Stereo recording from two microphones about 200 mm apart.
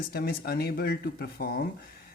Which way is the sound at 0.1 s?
50° left (ahead or behind).